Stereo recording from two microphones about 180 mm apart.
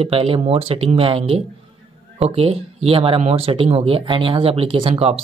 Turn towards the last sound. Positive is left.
turn(degrees=-35)  # may be behind; listen again after turning